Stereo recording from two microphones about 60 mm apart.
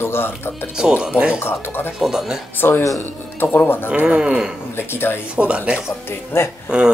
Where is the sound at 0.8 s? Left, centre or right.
Centre.